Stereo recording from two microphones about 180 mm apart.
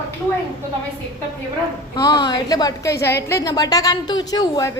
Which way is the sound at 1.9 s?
25° left (ahead or behind).